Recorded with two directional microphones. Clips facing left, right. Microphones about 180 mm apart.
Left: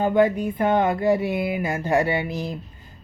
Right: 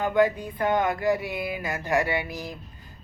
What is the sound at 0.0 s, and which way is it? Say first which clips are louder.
Speech: left 4 dB; 20° left (ahead or behind).